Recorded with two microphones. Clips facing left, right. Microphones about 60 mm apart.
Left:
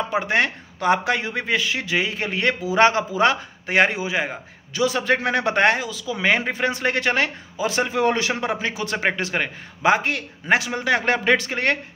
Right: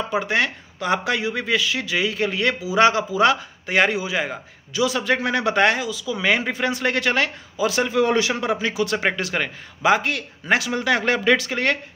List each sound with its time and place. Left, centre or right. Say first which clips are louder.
0.1 s speech: even; left